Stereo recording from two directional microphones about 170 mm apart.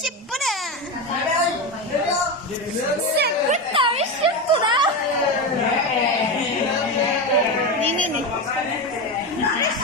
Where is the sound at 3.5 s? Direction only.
35° right (ahead or behind).